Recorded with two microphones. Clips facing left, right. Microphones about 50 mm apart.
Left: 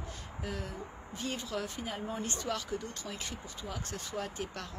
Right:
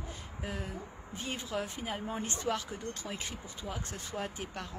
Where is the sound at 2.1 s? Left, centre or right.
Right.